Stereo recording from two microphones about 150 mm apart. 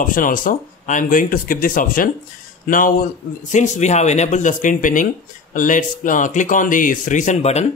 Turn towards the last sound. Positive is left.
turn(degrees=50)  # may be behind; listen again after turning